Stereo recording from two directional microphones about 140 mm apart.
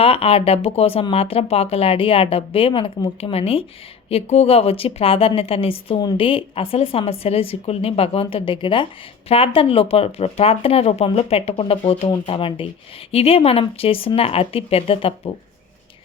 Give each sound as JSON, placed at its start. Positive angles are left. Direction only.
{"t": 0.0, "sound": "speech", "side_deg": 45}